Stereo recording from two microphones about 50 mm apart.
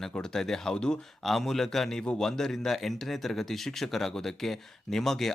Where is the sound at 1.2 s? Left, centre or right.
Centre.